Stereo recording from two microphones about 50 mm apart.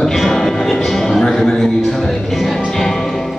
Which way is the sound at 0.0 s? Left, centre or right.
Centre.